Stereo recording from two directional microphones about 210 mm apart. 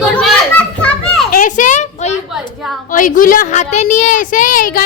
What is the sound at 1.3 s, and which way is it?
A child's voice, 40° left (ahead or behind).